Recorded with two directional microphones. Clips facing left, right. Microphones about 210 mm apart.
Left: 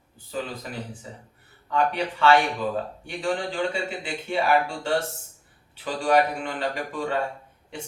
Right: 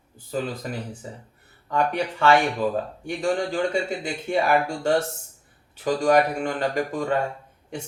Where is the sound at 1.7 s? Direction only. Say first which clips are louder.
Right 1 dB; 45° right (ahead or behind).